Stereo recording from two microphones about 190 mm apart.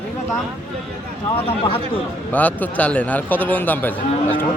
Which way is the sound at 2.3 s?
10° left (ahead or behind).